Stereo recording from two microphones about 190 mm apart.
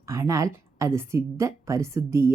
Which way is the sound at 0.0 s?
15° right (ahead or behind).